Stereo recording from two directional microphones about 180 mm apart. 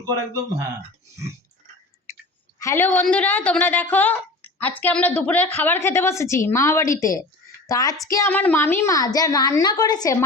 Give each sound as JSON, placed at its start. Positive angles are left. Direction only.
{"t": 0.0, "sound": "speech", "side_deg": -15}
{"t": 1.1, "sound": "a sound", "side_deg": -15}
{"t": 2.6, "sound": "a woman's voice", "side_deg": 15}